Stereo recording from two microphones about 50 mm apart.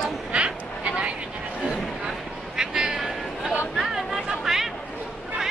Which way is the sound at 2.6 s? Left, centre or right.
Centre.